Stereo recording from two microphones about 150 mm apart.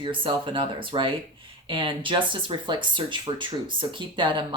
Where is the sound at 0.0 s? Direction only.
35° right (ahead or behind).